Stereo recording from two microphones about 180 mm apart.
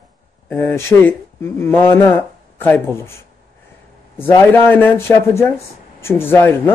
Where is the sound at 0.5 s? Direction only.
10° left (ahead or behind).